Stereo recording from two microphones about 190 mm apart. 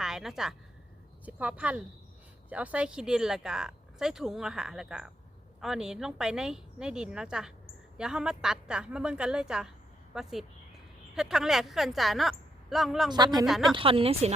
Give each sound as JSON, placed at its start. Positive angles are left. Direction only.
{"t": 0.0, "sound": "speech", "side_deg": 0}
{"t": 13.1, "sound": "a woman's voice", "side_deg": -20}
{"t": 13.4, "sound": "speech", "side_deg": 0}
{"t": 13.7, "sound": "a woman's voice", "side_deg": -30}